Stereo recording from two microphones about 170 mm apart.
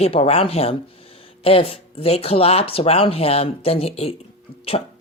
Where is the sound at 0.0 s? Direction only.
35° left (ahead or behind).